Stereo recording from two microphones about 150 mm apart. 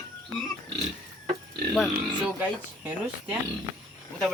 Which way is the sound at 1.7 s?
Centre (ahead or behind).